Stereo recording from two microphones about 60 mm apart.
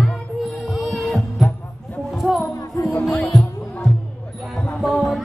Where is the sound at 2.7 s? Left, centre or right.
Left.